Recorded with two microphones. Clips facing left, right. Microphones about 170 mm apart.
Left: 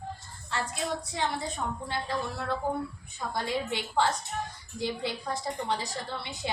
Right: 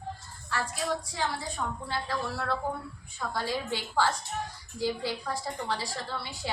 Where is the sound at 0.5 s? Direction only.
20° left (ahead or behind).